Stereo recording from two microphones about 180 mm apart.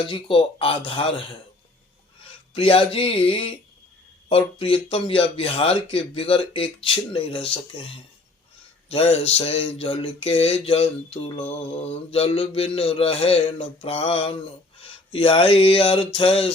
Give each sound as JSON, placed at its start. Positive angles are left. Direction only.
{"t": 0.1, "sound": "speech", "side_deg": 30}
{"t": 2.5, "sound": "speech", "side_deg": 30}
{"t": 8.9, "sound": "speech", "side_deg": 35}